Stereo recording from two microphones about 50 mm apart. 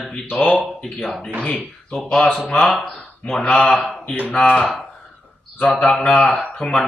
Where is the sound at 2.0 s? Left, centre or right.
Centre.